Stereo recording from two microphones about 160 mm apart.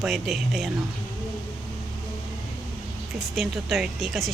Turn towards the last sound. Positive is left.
turn(degrees=0)  # may be behind; listen again after turning